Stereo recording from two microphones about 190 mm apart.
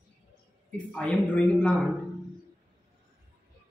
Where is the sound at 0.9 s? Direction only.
5° left (ahead or behind).